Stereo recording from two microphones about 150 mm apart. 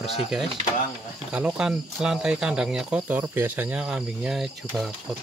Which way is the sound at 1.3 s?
5° right (ahead or behind).